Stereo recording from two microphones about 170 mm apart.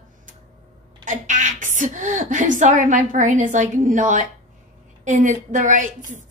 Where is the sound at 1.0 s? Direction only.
45° right (ahead or behind).